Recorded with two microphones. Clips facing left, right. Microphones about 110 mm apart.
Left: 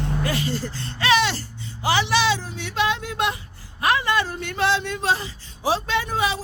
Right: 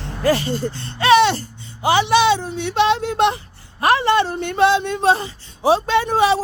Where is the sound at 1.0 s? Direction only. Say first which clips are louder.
Right 7 dB; 25° right (ahead or behind).